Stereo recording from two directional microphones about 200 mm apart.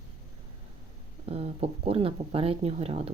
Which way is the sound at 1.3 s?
30° right (ahead or behind).